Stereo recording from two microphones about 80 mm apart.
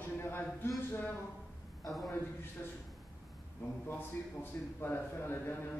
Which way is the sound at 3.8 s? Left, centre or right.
Left.